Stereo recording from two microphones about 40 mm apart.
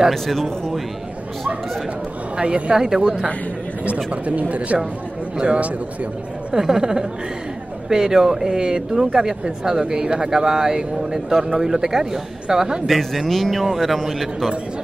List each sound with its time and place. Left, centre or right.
0.1 s a man's voice: centre
2.3 s speech: right
3.8 s speech: right
6.5 s speech: centre
12.8 s a man's voice: centre